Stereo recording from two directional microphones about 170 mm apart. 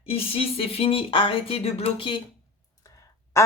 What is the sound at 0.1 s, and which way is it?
Speech, 35° left (ahead or behind).